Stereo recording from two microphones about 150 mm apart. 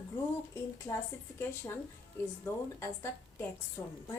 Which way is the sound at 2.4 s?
20° left (ahead or behind).